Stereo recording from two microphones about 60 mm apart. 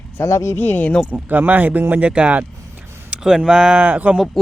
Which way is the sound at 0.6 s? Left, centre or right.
Left.